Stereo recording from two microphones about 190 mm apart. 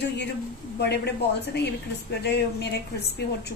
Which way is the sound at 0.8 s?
60° left (ahead or behind).